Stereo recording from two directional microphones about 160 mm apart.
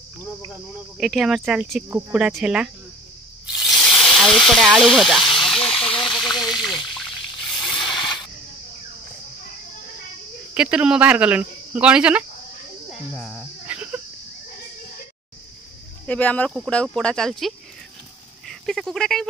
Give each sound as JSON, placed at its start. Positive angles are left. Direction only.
{"t": 0.9, "sound": "speech", "side_deg": 0}
{"t": 3.5, "sound": "sizzle", "side_deg": 0}
{"t": 5.4, "sound": "hiss", "side_deg": 0}
{"t": 5.9, "sound": "water", "side_deg": 5}
{"t": 7.9, "sound": "a sound", "side_deg": 30}
{"t": 10.5, "sound": "speech", "side_deg": -5}
{"t": 13.2, "sound": "cricket", "side_deg": -5}
{"t": 16.1, "sound": "speech", "side_deg": 10}